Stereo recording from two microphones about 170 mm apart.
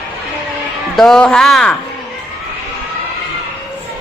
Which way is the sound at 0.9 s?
5° left (ahead or behind).